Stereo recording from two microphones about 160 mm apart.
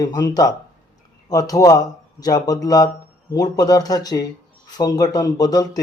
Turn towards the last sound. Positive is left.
turn(degrees=25)  # may be behind; listen again after turning